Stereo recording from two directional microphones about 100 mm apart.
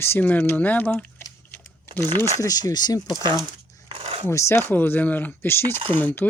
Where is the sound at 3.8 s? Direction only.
70° right (ahead or behind).